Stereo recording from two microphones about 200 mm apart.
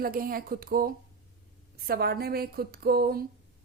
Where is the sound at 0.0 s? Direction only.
45° right (ahead or behind).